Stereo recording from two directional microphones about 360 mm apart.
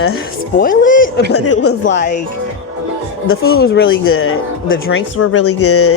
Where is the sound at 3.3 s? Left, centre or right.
Left.